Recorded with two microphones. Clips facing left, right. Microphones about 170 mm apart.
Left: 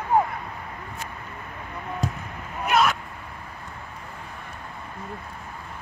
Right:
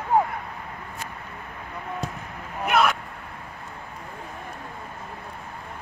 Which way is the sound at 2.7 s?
55° right (ahead or behind).